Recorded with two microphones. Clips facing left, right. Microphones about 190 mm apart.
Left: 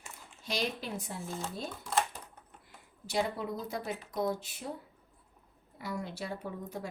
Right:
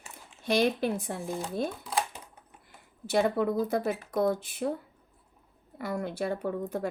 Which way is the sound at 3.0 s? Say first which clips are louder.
Right 7 dB; 55° right (ahead or behind).